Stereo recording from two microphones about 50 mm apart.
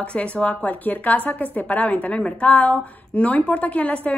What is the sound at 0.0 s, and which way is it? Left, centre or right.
A woman's voice, left.